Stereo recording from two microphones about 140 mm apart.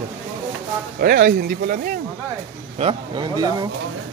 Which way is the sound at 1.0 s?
90° right.